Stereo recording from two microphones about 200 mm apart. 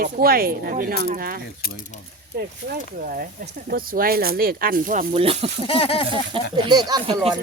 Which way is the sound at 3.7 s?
45° right (ahead or behind).